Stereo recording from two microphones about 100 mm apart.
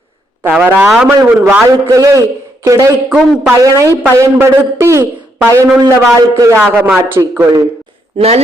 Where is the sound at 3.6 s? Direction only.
35° right (ahead or behind).